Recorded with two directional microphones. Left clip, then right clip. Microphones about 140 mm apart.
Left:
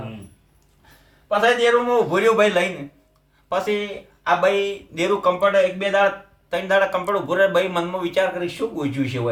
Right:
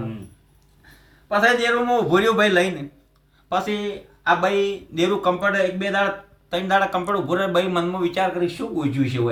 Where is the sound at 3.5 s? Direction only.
25° left (ahead or behind).